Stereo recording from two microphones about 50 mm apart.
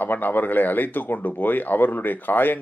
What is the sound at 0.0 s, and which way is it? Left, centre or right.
Speech, left.